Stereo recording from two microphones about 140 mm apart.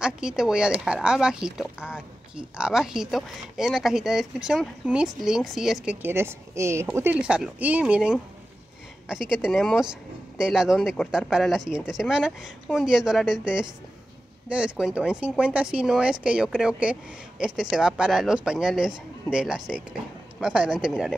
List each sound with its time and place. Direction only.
0.0 s speech: 5° right (ahead or behind)
6.0 s speech: 15° right (ahead or behind)